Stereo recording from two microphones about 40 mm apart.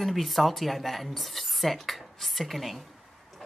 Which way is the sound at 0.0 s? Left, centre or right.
Centre.